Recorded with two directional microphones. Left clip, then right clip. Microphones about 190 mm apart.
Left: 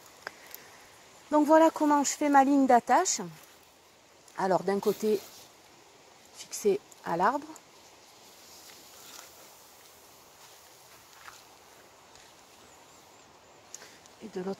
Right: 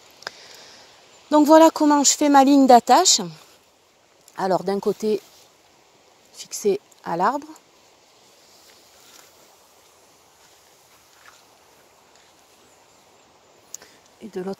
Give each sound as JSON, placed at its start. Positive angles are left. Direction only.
{"t": 0.3, "sound": "a sound", "side_deg": -60}
{"t": 1.3, "sound": "speech", "side_deg": -60}
{"t": 4.4, "sound": "speech", "side_deg": -55}
{"t": 6.3, "sound": "speech", "side_deg": -60}
{"t": 13.7, "sound": "a sound", "side_deg": -60}
{"t": 14.3, "sound": "speech", "side_deg": -60}